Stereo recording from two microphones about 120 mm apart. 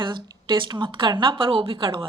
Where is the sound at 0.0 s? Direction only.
40° right (ahead or behind).